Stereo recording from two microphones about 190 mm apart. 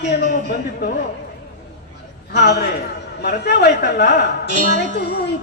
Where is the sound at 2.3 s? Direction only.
60° left (ahead or behind).